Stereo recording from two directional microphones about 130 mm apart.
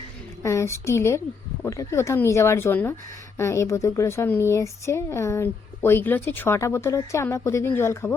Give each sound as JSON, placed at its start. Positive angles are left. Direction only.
{"t": 0.4, "sound": "a woman's voice", "side_deg": 20}